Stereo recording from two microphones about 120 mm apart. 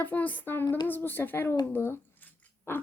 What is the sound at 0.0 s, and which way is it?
Speech, 15° left (ahead or behind).